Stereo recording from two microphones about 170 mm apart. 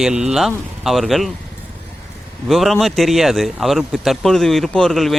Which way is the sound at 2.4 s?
Centre (ahead or behind).